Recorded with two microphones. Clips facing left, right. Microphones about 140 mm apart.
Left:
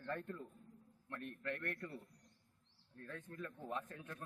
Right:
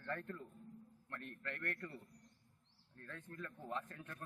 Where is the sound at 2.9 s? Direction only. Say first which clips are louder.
Left 2 dB; 15° left (ahead or behind).